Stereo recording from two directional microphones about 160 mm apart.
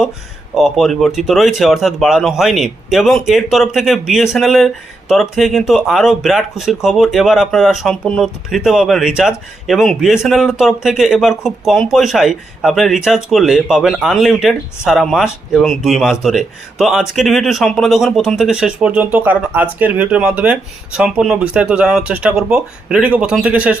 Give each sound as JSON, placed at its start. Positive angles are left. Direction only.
{"t": 0.5, "sound": "speech", "side_deg": 0}